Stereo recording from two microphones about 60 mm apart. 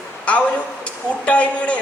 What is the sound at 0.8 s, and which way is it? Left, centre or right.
Speech, centre.